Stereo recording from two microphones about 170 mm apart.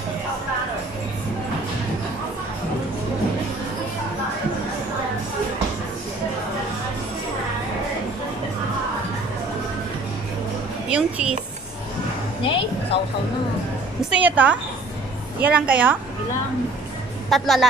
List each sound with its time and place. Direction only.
10.9 s speech: 5° right (ahead or behind)
12.4 s music: 30° left (ahead or behind)
14.1 s a woman's voice: 10° right (ahead or behind)
17.3 s a woman's voice: centre (ahead or behind)